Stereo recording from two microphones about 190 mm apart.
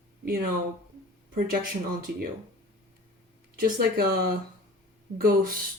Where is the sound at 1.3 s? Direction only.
50° right (ahead or behind).